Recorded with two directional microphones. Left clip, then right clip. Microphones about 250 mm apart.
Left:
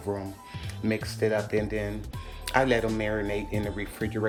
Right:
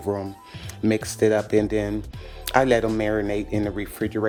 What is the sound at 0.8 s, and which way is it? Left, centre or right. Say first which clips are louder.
Speech: right 7 dB; right.